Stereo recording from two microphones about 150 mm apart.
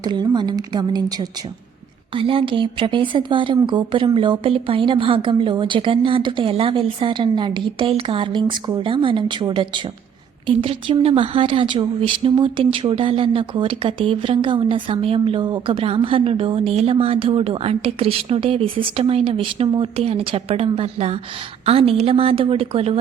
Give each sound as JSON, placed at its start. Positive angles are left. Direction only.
{"t": 0.0, "sound": "a woman's voice", "side_deg": -30}